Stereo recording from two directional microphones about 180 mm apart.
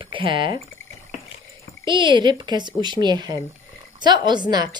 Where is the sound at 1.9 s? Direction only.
25° right (ahead or behind).